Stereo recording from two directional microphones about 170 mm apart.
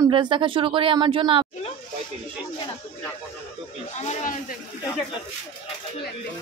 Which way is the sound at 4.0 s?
45° left (ahead or behind).